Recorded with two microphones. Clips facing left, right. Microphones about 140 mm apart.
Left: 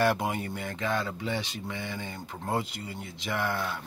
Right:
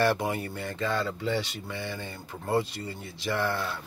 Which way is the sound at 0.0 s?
15° left (ahead or behind).